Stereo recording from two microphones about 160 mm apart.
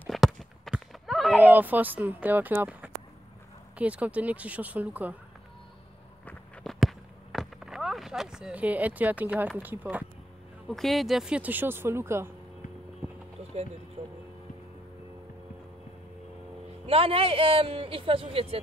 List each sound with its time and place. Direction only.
0.0 s a sound: centre (ahead or behind)
3.7 s speech: 10° right (ahead or behind)
6.2 s walk: 5° left (ahead or behind)
9.6 s speech: 10° right (ahead or behind)
10.7 s speech: centre (ahead or behind); by 12.3 s 15° right (ahead or behind)
14.0 s speech: 35° right (ahead or behind)
16.8 s speech: 35° right (ahead or behind)